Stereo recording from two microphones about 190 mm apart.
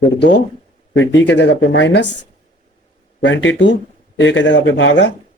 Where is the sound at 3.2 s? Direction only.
80° left.